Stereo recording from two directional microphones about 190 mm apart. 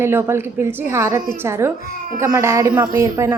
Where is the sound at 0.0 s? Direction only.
10° right (ahead or behind).